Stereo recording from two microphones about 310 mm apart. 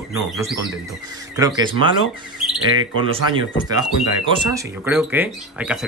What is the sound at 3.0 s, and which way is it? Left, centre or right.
Speech, centre.